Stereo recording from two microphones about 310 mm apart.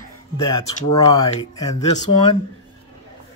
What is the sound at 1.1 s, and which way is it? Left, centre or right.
Speech, centre.